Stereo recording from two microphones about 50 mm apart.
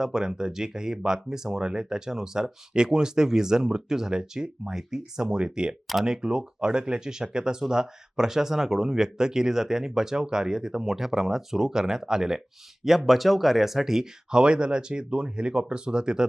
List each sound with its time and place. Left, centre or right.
0.0 s speech: centre